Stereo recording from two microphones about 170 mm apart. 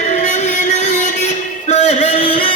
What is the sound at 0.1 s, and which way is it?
Music, 45° left (ahead or behind).